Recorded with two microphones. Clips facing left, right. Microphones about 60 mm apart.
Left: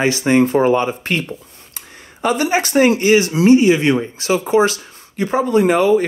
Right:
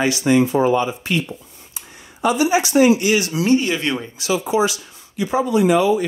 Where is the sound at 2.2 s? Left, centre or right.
Left.